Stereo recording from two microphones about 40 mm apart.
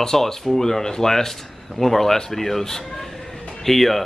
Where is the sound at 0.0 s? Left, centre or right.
Centre.